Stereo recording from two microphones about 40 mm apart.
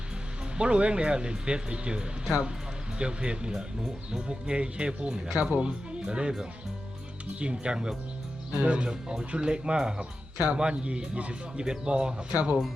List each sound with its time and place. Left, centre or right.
0.5 s speech: right
7.3 s speech: right
8.5 s speech: right
8.9 s speech: right